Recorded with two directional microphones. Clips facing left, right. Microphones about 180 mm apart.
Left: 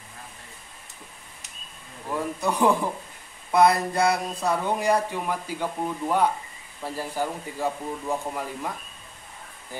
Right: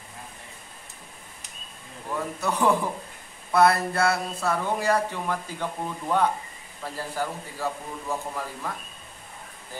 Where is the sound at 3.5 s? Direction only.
15° left (ahead or behind).